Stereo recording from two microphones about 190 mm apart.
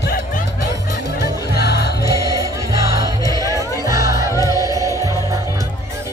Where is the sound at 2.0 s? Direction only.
20° left (ahead or behind).